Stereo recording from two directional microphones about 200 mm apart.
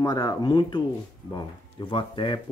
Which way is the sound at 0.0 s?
20° left (ahead or behind).